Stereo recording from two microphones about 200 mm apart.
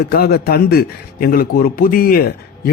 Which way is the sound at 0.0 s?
50° left (ahead or behind).